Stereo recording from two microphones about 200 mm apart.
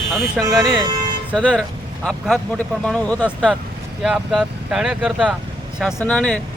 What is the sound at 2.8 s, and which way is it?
Speech, 5° left (ahead or behind).